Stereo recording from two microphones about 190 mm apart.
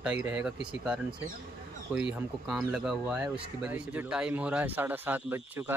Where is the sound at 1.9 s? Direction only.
5° right (ahead or behind).